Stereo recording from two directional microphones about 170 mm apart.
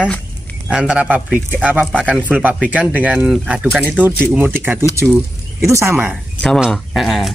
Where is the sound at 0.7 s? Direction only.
5° right (ahead or behind).